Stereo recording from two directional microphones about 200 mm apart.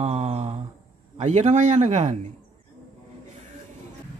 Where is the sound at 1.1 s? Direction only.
35° right (ahead or behind).